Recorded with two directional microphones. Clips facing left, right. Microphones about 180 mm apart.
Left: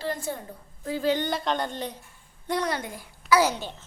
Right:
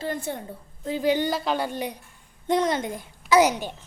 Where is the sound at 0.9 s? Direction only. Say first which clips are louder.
Right 2 dB; 15° right (ahead or behind).